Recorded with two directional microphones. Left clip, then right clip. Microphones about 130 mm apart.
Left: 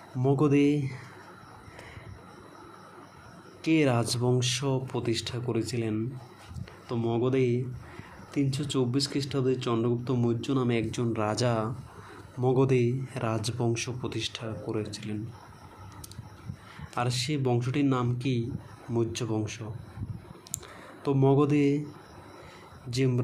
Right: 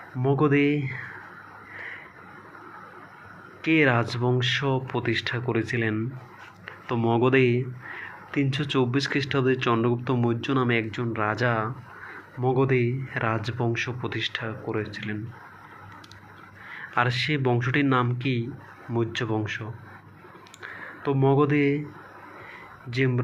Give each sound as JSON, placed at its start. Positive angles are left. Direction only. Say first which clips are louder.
{"t": 0.2, "sound": "speech", "louder": "right 2 dB", "side_deg": 25}
{"t": 3.6, "sound": "speech", "louder": "right 4 dB", "side_deg": 20}
{"t": 6.8, "sound": "speech", "louder": "right 6 dB", "side_deg": 5}
{"t": 10.9, "sound": "speech", "louder": "right 3 dB", "side_deg": 35}
{"t": 16.9, "sound": "speech", "louder": "right 6 dB", "side_deg": 15}
{"t": 20.6, "sound": "a sound", "louder": "right 7 dB", "side_deg": 30}
{"t": 22.9, "sound": "speech", "louder": "right 3 dB", "side_deg": 25}